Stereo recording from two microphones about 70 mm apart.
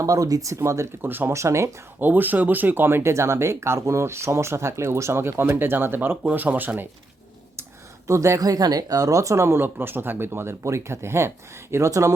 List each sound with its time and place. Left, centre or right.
0.0 s speech: right
1.0 s speech: right
1.3 s speech: right
2.0 s speech: right
8.0 s speech: right
8.4 s speech: right